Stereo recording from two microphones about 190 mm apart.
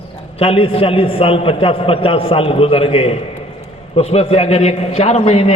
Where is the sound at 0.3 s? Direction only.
30° left (ahead or behind).